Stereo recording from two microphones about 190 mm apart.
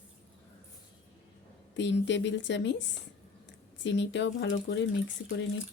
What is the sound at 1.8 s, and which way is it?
Speech, 70° left (ahead or behind).